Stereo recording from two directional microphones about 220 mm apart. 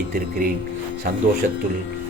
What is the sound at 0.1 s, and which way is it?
Speech, 40° right (ahead or behind).